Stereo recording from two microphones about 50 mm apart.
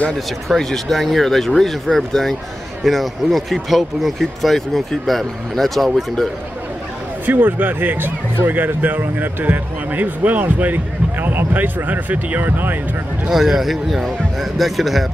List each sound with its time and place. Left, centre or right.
0.6 s speech: centre
7.2 s speech: right
13.3 s speech: centre